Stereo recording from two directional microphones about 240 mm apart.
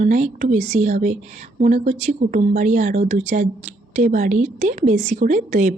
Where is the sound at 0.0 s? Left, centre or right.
Right.